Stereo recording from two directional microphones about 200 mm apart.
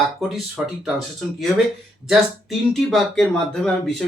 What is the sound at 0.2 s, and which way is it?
Speech, centre (ahead or behind).